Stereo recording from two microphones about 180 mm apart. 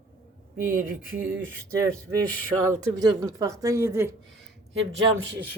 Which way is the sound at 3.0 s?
20° right (ahead or behind).